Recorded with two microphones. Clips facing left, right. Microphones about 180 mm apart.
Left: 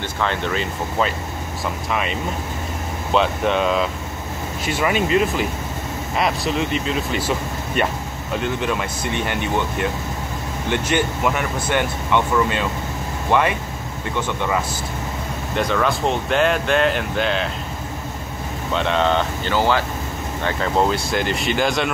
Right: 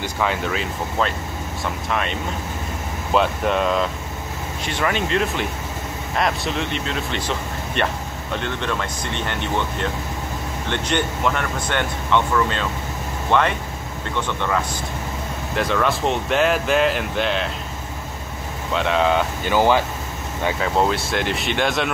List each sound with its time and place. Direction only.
0.2 s speech: 5° right (ahead or behind)
18.7 s speech: centre (ahead or behind)
20.4 s speech: 5° right (ahead or behind)